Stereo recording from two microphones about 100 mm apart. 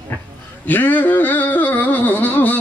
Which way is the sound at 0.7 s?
15° left (ahead or behind).